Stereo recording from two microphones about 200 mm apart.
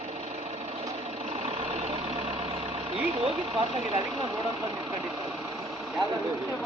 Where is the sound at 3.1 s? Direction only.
25° right (ahead or behind).